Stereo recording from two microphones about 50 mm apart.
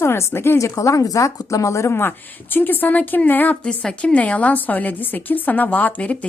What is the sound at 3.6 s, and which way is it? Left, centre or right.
A woman's voice, centre.